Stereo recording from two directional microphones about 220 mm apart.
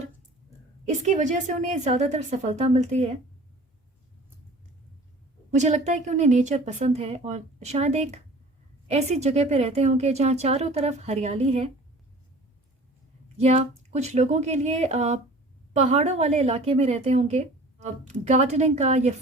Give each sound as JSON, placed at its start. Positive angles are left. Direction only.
{"t": 1.0, "sound": "a woman's voice", "side_deg": -35}
{"t": 5.5, "sound": "a woman's voice", "side_deg": -30}
{"t": 13.2, "sound": "a woman's voice", "side_deg": -30}